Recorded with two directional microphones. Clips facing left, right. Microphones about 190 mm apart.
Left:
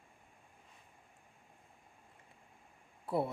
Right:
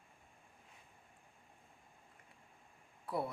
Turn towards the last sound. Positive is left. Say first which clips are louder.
# left 5 dB
turn(degrees=25)  # may be behind; listen again after turning